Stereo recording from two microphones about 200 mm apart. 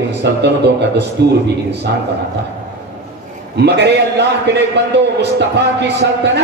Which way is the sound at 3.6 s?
55° right (ahead or behind).